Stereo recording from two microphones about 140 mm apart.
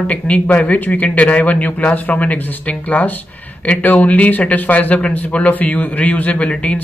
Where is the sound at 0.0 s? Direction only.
10° left (ahead or behind).